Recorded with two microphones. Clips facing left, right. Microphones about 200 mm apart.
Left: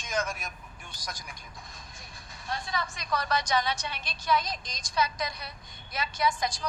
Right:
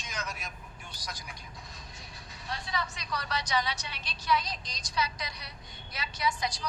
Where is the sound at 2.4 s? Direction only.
50° left (ahead or behind).